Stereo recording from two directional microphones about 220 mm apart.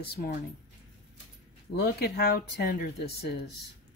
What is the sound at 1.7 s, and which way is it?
Speech, 45° left (ahead or behind).